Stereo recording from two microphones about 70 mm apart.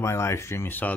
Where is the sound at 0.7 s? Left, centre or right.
Left.